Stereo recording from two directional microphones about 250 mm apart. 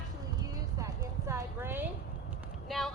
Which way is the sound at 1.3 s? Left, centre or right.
Centre.